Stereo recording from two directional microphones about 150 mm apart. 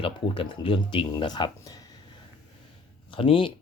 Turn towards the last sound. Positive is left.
turn(degrees=35)  # may be behind; listen again after turning